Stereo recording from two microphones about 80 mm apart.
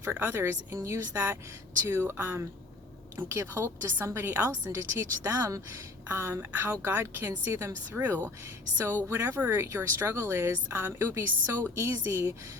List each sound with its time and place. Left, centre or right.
0.0 s a woman's voice: right
6.1 s a woman's voice: right